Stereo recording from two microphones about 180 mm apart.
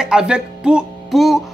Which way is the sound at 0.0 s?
5° right (ahead or behind).